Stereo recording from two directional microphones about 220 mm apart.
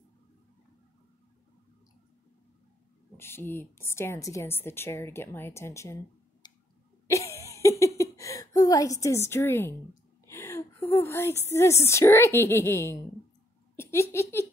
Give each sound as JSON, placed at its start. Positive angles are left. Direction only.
{"t": 3.2, "sound": "a woman's voice", "side_deg": 10}
{"t": 6.4, "sound": "a sound", "side_deg": 20}
{"t": 11.4, "sound": "a woman's voice", "side_deg": 10}
{"t": 13.7, "sound": "giggle", "side_deg": 10}